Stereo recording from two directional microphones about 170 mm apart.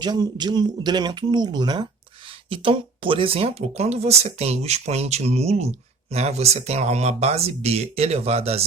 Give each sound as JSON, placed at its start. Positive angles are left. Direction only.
{"t": 0.0, "sound": "speech", "side_deg": -25}